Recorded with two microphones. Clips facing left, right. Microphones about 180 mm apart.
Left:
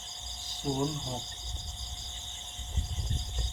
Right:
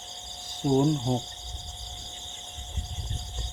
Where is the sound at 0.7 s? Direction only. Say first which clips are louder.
Right 9 dB; 55° right (ahead or behind).